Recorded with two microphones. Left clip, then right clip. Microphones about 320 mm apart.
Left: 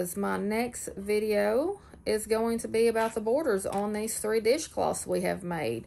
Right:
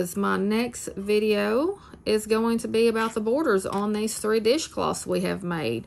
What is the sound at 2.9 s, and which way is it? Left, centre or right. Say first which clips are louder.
Speech: right 2 dB; centre.